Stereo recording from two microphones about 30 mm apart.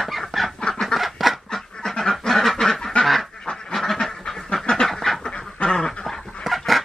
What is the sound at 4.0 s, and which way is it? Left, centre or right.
Duck, centre.